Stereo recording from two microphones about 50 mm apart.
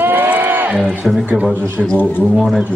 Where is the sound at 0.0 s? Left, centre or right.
Right.